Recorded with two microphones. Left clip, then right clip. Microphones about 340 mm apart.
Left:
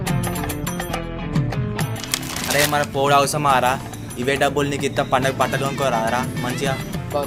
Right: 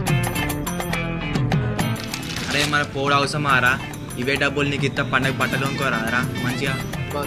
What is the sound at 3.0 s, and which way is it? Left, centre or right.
Speech, left.